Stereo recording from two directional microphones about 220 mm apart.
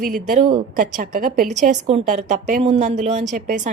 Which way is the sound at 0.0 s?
40° right (ahead or behind).